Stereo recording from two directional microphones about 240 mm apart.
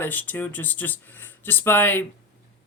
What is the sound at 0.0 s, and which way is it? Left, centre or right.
Speech, centre.